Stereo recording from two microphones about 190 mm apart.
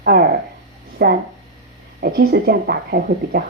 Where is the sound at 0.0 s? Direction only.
55° right (ahead or behind).